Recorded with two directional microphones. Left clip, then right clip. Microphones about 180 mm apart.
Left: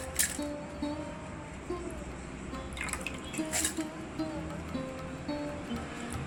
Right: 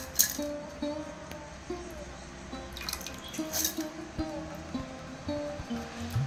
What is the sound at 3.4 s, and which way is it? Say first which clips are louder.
Music: even; centre (ahead or behind).